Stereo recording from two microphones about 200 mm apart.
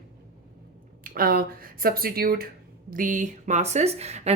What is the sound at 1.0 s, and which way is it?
A woman's voice, 45° right (ahead or behind).